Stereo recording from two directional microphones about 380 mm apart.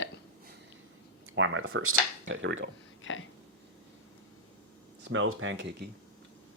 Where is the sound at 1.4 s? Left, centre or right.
Right.